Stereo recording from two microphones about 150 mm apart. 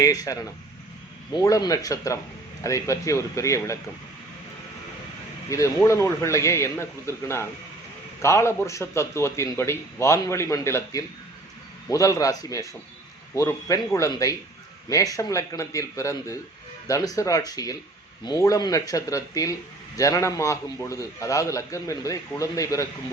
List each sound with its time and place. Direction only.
0.0 s a man's voice: 25° left (ahead or behind)
5.5 s a man's voice: 20° left (ahead or behind)